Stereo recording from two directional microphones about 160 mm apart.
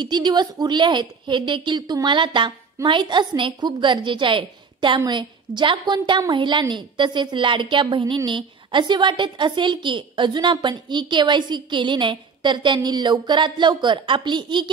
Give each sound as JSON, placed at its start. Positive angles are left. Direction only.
{"t": 0.0, "sound": "a woman's voice", "side_deg": -25}